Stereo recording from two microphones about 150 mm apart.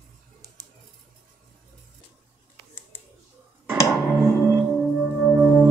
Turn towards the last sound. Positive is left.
turn(degrees=0)  # may be behind; listen again after turning